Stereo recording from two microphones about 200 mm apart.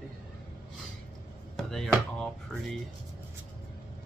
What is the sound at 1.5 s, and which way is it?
Speech, centre (ahead or behind).